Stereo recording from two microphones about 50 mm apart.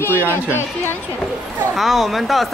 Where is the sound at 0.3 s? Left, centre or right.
Left.